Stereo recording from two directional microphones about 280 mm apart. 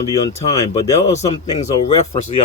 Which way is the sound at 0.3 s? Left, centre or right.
Left.